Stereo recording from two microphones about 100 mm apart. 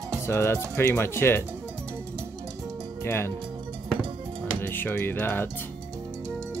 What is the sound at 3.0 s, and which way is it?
Speech, 25° left (ahead or behind).